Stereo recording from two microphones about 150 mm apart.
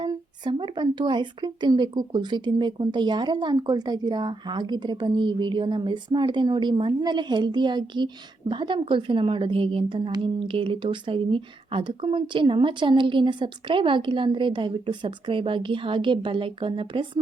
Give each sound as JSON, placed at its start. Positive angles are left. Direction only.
{"t": 0.0, "sound": "speech", "side_deg": -30}